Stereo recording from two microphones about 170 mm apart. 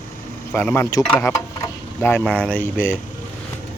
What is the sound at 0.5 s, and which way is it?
A man's voice, 10° left (ahead or behind).